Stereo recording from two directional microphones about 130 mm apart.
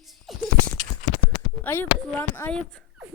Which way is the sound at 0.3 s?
Centre (ahead or behind).